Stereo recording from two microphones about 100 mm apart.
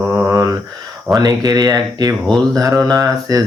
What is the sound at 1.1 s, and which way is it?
Speech, 45° right (ahead or behind).